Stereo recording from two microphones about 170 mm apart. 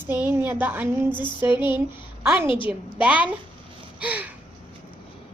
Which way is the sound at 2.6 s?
10° right (ahead or behind).